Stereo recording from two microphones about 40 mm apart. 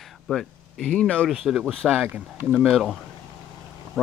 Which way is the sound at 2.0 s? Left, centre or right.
Right.